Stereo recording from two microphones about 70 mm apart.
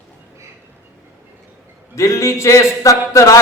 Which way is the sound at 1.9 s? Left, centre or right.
Left.